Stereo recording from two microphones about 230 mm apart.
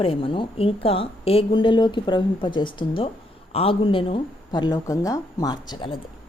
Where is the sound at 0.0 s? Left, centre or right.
Left.